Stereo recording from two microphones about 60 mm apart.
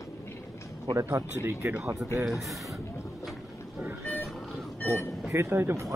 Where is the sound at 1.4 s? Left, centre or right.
Right.